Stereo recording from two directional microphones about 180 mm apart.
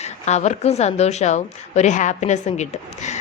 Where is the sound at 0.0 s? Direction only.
40° left (ahead or behind).